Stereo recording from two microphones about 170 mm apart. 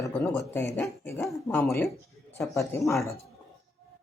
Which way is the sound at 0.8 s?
15° left (ahead or behind).